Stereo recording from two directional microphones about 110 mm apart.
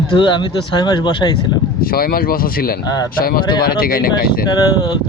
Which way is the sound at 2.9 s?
40° left (ahead or behind).